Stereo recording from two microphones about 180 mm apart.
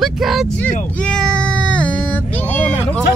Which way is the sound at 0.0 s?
Centre (ahead or behind).